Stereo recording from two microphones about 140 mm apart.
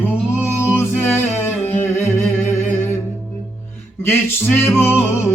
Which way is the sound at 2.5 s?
15° left (ahead or behind).